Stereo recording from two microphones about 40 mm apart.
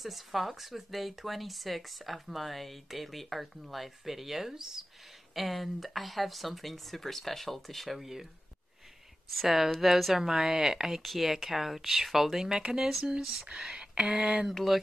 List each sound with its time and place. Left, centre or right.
0.0 s speech: centre
9.3 s speech: centre
11.0 s speech: centre
14.5 s speech: centre